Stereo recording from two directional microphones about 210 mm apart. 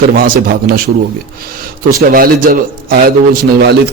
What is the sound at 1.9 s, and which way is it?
A man's voice, 45° right (ahead or behind).